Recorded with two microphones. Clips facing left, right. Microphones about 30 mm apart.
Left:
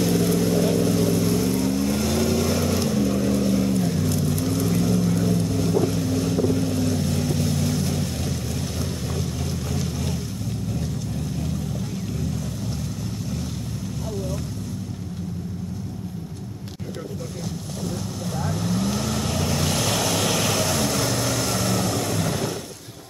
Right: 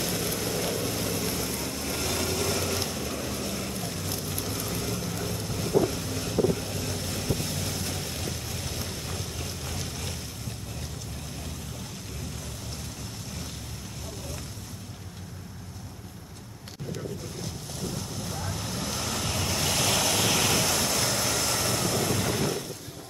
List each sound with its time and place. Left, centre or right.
0.0 s vehicle: centre
18.3 s vehicle: centre